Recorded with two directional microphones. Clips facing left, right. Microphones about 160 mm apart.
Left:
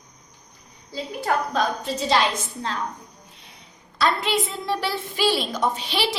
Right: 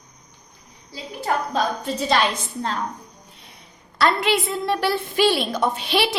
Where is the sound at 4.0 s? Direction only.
65° right (ahead or behind).